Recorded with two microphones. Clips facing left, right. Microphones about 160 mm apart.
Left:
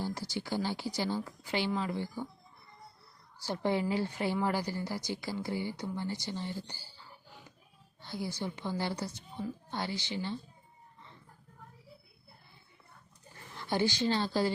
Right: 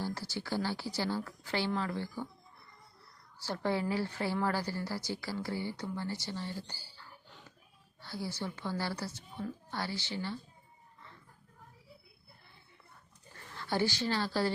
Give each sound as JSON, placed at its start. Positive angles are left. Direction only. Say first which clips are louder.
{"t": 0.0, "sound": "speech", "louder": "left 1 dB", "side_deg": 15}
{"t": 3.4, "sound": "speech", "louder": "left 2 dB", "side_deg": 15}
{"t": 13.5, "sound": "a woman's voice", "louder": "left 1 dB", "side_deg": 20}